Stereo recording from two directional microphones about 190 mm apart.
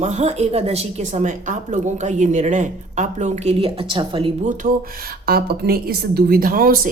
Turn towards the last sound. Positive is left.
turn(degrees=-50)  # may be behind; listen again after turning